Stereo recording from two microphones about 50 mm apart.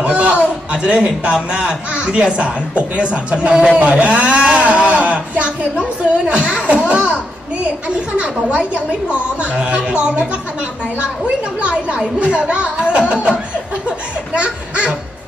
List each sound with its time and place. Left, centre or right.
0.0 s a sound: right
0.8 s a man's voice: right
8.2 s a man's voice: right
12.4 s a man's voice: right
13.8 s laughter: right